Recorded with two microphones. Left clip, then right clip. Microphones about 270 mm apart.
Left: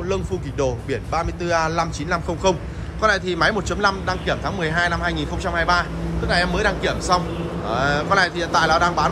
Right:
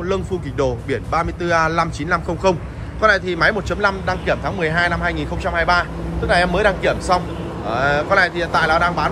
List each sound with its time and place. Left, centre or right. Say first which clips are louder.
0.1 s a man's voice: right 2 dB; centre